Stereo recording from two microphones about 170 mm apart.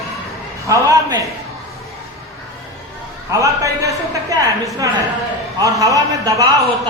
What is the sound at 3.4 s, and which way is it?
A man's voice, 20° right (ahead or behind).